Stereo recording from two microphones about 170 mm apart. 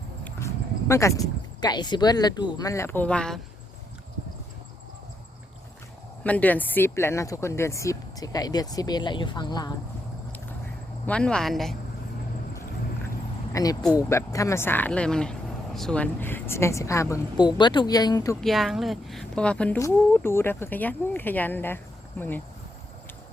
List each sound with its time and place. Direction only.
0.3 s a sound: 15° left (ahead or behind)
1.6 s speech: 25° left (ahead or behind); by 3.4 s 5° left (ahead or behind)
6.2 s speech: 10° left (ahead or behind); by 9.7 s 25° left (ahead or behind)
11.0 s speech: 5° left (ahead or behind)
13.5 s speech: 20° left (ahead or behind)
18.3 s speech: centre (ahead or behind)